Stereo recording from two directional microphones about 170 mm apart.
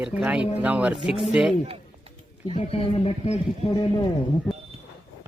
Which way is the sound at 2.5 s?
35° left (ahead or behind).